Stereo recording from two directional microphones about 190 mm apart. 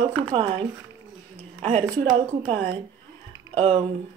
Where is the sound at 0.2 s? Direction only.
30° right (ahead or behind).